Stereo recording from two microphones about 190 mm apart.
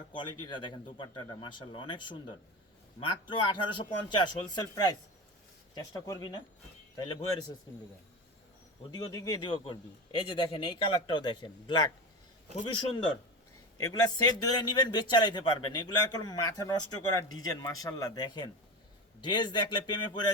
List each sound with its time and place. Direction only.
0.1 s a man's voice: 25° left (ahead or behind)
8.9 s a man's voice: 20° left (ahead or behind)